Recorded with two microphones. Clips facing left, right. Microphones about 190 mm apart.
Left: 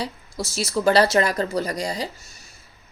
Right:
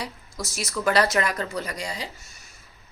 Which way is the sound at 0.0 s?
30° left (ahead or behind).